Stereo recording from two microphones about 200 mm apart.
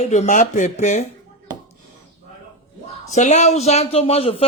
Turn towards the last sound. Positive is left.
turn(degrees=30)  # may be behind; listen again after turning